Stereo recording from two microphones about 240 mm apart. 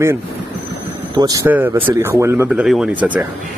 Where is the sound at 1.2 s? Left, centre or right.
Centre.